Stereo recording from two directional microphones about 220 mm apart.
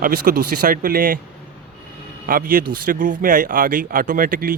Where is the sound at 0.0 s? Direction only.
40° right (ahead or behind).